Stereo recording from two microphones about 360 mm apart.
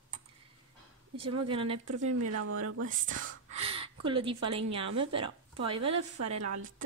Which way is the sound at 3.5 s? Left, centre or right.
Right.